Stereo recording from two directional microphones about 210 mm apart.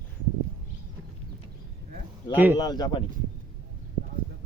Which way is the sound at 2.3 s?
10° right (ahead or behind).